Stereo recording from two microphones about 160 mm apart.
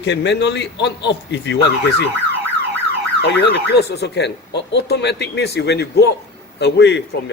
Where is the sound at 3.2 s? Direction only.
90° left.